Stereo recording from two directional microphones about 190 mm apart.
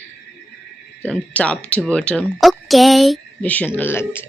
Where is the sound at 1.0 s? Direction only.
5° left (ahead or behind).